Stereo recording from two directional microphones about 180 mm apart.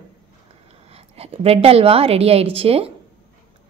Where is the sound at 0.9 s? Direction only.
35° right (ahead or behind).